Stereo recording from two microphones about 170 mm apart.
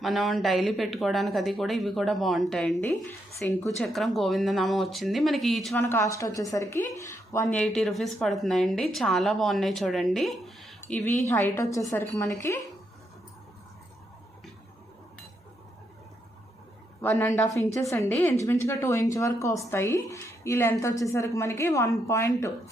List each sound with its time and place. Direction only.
0.0 s speech: centre (ahead or behind)
5.9 s speech: 15° left (ahead or behind)
7.4 s a woman's voice: 5° left (ahead or behind)
17.0 s speech: 15° left (ahead or behind)